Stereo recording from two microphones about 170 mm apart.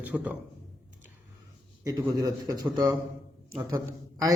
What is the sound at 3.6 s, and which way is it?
Speech, 20° right (ahead or behind).